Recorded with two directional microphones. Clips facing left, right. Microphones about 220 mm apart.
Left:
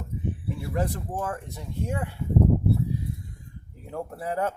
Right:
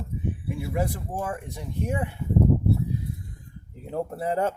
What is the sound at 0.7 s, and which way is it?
Speech, 10° right (ahead or behind).